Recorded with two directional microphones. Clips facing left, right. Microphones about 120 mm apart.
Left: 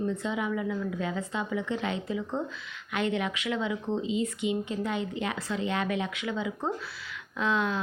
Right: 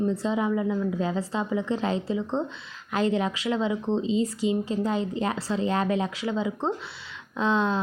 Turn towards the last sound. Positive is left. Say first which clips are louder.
# right 4 dB
turn(degrees=-30)  # may be behind; listen again after turning